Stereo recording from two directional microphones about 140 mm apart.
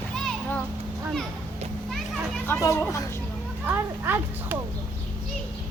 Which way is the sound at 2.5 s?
20° left (ahead or behind).